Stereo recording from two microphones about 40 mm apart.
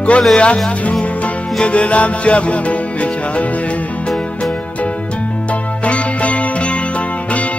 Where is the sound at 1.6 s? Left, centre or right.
Left.